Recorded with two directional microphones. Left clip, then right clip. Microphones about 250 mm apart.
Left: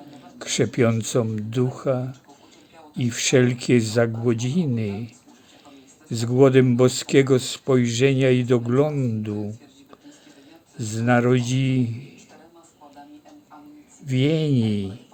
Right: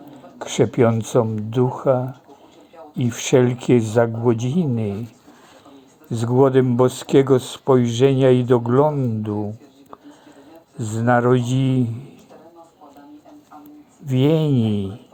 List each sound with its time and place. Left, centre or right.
0.1 s a man's voice: centre
6.2 s a man's voice: centre
7.3 s speech: left
7.6 s a man's voice: centre
11.0 s a man's voice: centre
14.1 s a man's voice: centre